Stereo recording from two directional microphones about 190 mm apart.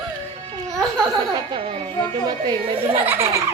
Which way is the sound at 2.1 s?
20° right (ahead or behind).